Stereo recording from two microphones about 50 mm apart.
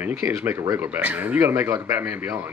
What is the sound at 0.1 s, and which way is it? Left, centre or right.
Speech, right.